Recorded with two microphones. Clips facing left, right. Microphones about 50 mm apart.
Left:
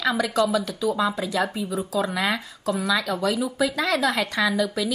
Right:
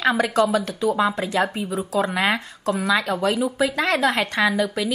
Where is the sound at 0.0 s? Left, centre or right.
Right.